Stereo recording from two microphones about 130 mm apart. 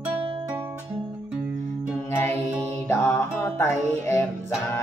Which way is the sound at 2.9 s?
20° left (ahead or behind).